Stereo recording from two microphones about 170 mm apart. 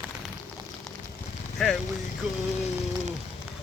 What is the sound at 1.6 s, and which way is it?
Vehicle, centre (ahead or behind).